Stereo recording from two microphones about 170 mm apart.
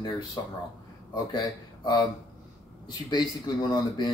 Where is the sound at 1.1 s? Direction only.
25° left (ahead or behind).